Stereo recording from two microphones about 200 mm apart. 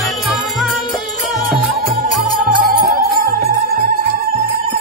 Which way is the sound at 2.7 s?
50° right (ahead or behind).